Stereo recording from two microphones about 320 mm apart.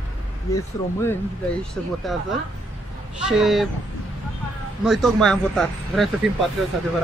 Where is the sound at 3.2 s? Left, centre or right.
Centre.